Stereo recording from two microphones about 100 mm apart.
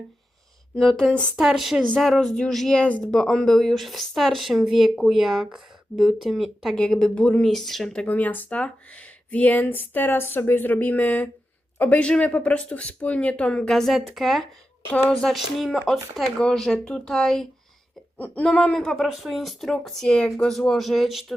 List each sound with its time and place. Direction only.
0.8 s speech: 5° left (ahead or behind)
1.4 s speech: 5° right (ahead or behind)
8.0 s speech: 15° left (ahead or behind)
18.9 s speech: centre (ahead or behind)